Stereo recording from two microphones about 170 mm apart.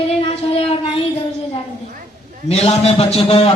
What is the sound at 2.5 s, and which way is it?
A man's voice, 35° left (ahead or behind).